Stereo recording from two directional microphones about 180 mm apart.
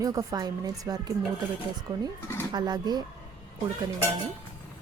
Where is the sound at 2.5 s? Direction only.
25° right (ahead or behind).